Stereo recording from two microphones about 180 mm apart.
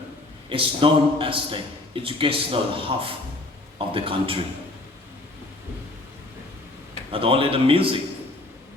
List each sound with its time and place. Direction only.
0.5 s a man's voice: 30° right (ahead or behind)
7.1 s a man's voice: 30° right (ahead or behind)